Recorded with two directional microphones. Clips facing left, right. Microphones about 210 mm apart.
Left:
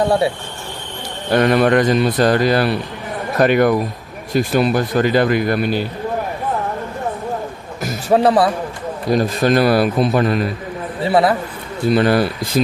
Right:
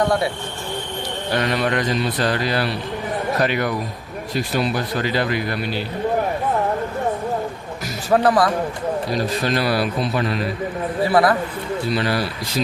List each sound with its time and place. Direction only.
1.3 s speech: 55° left (ahead or behind)
8.1 s a man's voice: 25° left (ahead or behind)
9.1 s speech: 50° left (ahead or behind)
11.0 s a man's voice: 25° left (ahead or behind)
11.9 s speech: 50° left (ahead or behind)